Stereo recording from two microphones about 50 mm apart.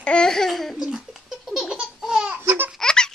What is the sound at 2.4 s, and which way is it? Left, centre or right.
Baby laughter, right.